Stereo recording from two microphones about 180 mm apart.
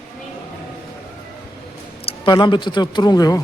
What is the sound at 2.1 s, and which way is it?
Speech, 25° left (ahead or behind).